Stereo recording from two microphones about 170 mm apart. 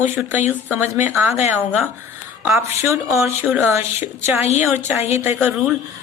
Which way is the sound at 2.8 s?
15° right (ahead or behind).